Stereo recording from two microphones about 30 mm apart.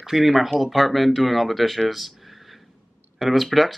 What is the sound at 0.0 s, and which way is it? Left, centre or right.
Speech, centre.